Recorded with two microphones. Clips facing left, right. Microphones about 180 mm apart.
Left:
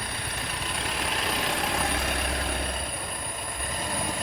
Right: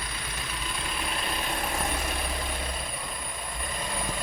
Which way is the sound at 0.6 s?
70° left (ahead or behind).